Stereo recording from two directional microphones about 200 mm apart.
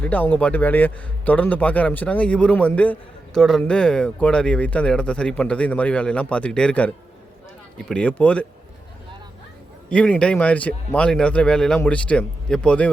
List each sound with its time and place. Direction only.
0.0 s a man's voice: 10° left (ahead or behind)
9.9 s speech: 5° left (ahead or behind)